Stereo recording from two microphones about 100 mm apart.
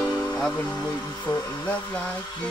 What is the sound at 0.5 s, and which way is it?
Speech, 10° left (ahead or behind).